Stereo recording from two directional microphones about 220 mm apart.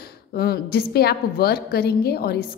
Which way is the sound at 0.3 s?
45° left (ahead or behind).